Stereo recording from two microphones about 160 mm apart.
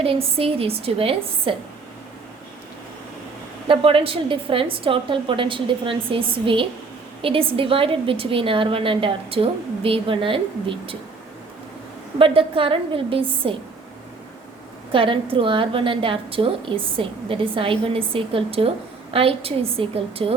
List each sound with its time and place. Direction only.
0.0 s a woman's voice: 35° right (ahead or behind)
3.7 s a woman's voice: 35° right (ahead or behind)
12.2 s a woman's voice: 35° right (ahead or behind)
14.9 s a woman's voice: 35° right (ahead or behind)